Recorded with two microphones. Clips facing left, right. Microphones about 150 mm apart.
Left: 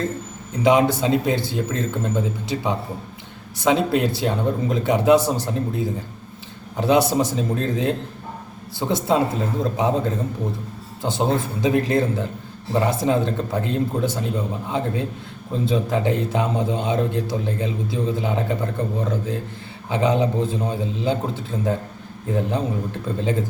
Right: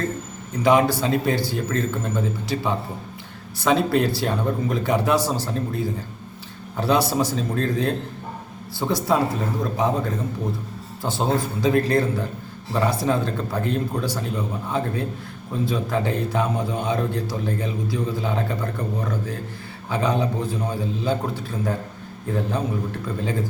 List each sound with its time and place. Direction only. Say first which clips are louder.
0.6 s a man's voice: left 1 dB; 20° left (ahead or behind)
11.0 s a man's voice: left 1 dB; 20° left (ahead or behind)